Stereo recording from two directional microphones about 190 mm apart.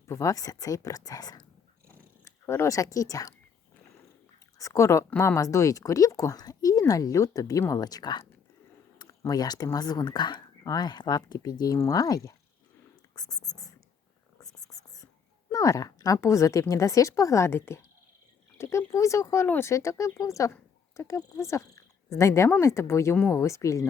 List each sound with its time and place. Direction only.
0.0 s speech: 15° left (ahead or behind)
4.5 s speech: 15° left (ahead or behind)
13.1 s a sound: 20° left (ahead or behind)
14.4 s whispering: 20° left (ahead or behind)
15.5 s speech: 15° left (ahead or behind)